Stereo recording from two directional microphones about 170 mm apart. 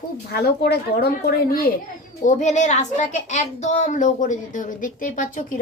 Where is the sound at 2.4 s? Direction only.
45° left (ahead or behind).